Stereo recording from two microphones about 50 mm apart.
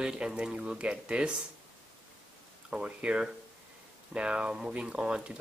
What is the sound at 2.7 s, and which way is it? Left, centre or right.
Speech, right.